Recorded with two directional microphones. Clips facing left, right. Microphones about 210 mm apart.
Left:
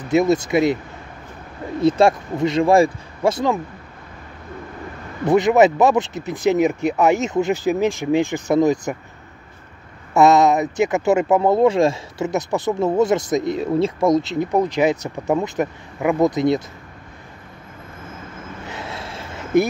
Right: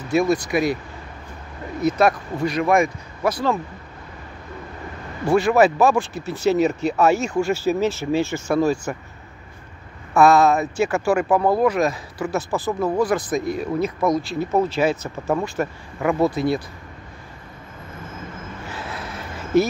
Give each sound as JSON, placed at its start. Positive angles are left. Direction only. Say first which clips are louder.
{"t": 0.1, "sound": "speech", "louder": "left 3 dB", "side_deg": 20}
{"t": 1.8, "sound": "speech", "louder": "left 3 dB", "side_deg": 30}
{"t": 5.2, "sound": "speech", "louder": "left 2 dB", "side_deg": 20}
{"t": 10.1, "sound": "speech", "louder": "left 1 dB", "side_deg": 20}
{"t": 18.7, "sound": "vehicle", "louder": "left 1 dB", "side_deg": 25}